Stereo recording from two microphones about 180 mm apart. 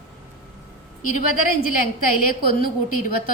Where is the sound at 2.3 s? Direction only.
50° left (ahead or behind).